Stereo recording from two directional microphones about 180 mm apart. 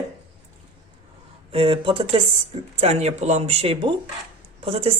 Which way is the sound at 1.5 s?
30° right (ahead or behind).